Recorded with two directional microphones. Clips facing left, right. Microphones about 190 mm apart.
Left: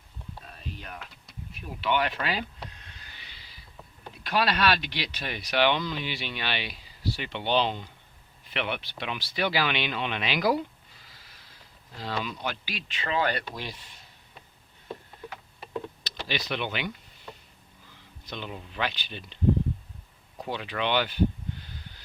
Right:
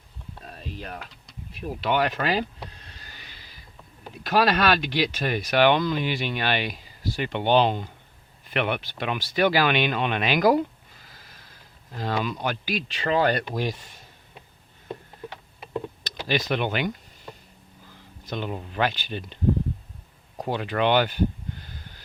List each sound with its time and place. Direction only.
0.4 s a sound: 40° right (ahead or behind)
1.6 s vehicle: 40° right (ahead or behind)
4.2 s speech: 45° right (ahead or behind)
11.9 s speech: 50° right (ahead or behind)
16.2 s speech: 45° right (ahead or behind)
20.4 s speech: 45° right (ahead or behind)